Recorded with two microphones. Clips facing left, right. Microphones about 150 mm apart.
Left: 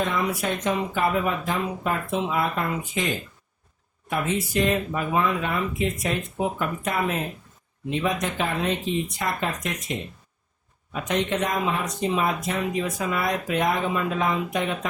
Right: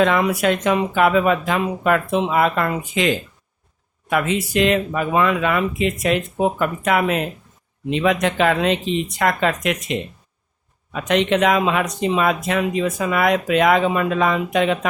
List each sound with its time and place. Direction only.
0.0 s speech: 80° right